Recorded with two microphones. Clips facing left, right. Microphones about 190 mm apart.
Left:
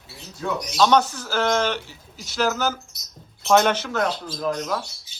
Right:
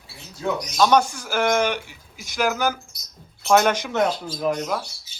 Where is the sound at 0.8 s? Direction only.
10° right (ahead or behind).